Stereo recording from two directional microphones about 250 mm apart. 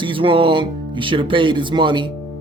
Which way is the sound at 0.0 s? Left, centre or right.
Centre.